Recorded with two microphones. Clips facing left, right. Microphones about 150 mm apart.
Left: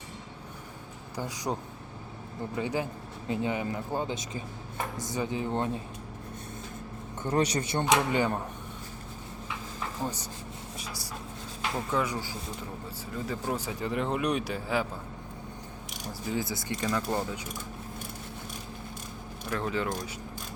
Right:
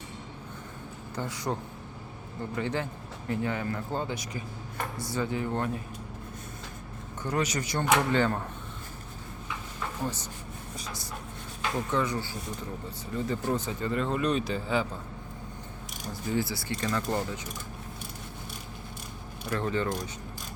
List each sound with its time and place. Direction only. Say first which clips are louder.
1.1 s speech: even; 15° left (ahead or behind)
2.6 s speech: left 1 dB; 15° left (ahead or behind)
7.2 s speech: left 2 dB; 30° left (ahead or behind)
7.9 s speech: right 2 dB; 15° left (ahead or behind)
10.0 s speech: even; 10° left (ahead or behind)
11.9 s speech: even; 10° left (ahead or behind)
16.3 s speech: right 2 dB; 20° left (ahead or behind)
16.8 s speech: even; 10° left (ahead or behind)
19.5 s speech: right 1 dB; centre (ahead or behind)